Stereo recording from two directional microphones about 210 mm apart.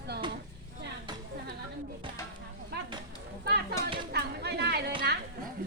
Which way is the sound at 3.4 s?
50° right (ahead or behind).